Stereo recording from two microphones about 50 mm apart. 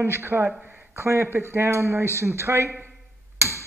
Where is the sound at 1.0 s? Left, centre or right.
Right.